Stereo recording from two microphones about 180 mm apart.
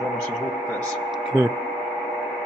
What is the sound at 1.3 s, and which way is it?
Speech, 15° right (ahead or behind).